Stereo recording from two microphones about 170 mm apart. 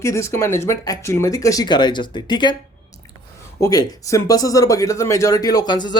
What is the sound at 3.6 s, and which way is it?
Speech, 20° left (ahead or behind).